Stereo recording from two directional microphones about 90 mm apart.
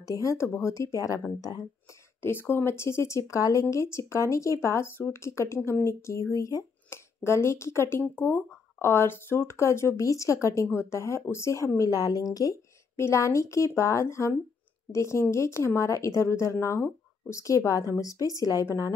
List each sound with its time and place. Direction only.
0.0 s speech: 40° left (ahead or behind)
2.2 s speech: 25° left (ahead or behind); by 12.5 s 40° left (ahead or behind)
12.9 s speech: 30° left (ahead or behind)